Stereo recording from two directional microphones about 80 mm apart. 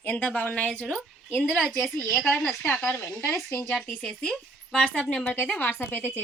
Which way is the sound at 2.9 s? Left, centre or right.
Left.